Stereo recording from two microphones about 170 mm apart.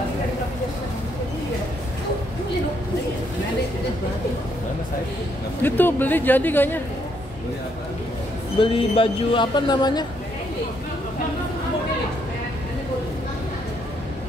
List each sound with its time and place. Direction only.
5.6 s speech: 10° left (ahead or behind)
8.5 s speech: 30° left (ahead or behind)